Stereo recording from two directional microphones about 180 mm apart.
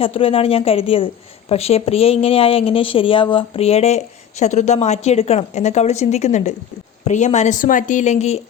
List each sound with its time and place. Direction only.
0.0 s a woman's voice: 30° left (ahead or behind)